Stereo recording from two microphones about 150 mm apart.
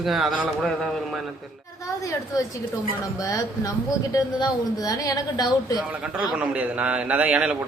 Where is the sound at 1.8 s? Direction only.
25° left (ahead or behind).